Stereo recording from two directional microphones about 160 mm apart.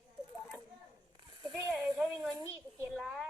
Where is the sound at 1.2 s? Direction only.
30° right (ahead or behind).